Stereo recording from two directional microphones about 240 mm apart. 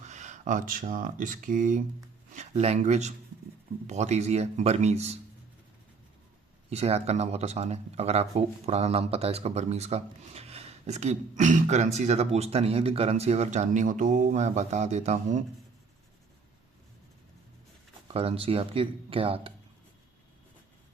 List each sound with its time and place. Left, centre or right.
0.0 s speech: right
6.7 s speech: right
18.1 s speech: right